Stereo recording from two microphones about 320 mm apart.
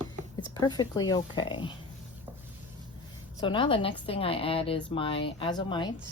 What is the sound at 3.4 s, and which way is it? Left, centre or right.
A woman's voice, centre.